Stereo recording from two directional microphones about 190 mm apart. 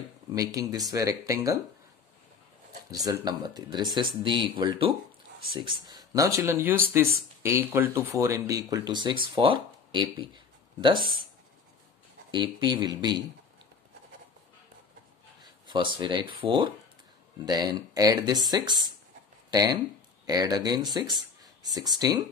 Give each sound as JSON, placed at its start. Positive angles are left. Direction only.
{"t": 0.3, "sound": "speech", "side_deg": -20}
{"t": 2.9, "sound": "speech", "side_deg": -20}
{"t": 12.3, "sound": "speech", "side_deg": -25}
{"t": 15.6, "sound": "speech", "side_deg": -25}